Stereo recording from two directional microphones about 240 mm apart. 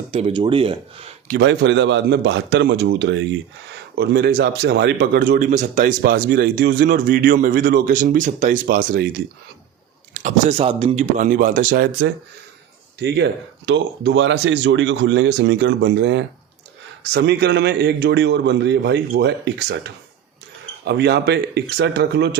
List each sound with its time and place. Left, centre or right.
0.1 s speech: right
1.3 s a man's voice: right